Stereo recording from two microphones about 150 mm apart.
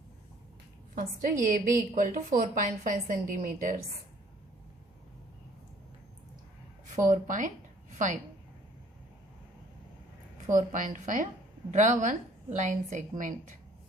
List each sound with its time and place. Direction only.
0.9 s a woman's voice: 60° right (ahead or behind)
7.0 s a woman's voice: 60° right (ahead or behind)
10.5 s a woman's voice: 60° right (ahead or behind)